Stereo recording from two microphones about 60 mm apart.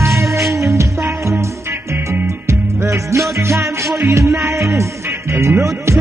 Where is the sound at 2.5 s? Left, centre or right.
Right.